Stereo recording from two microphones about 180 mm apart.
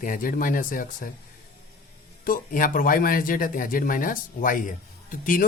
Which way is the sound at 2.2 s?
50° left (ahead or behind).